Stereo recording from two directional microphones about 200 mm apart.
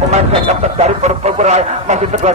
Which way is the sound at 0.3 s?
30° right (ahead or behind).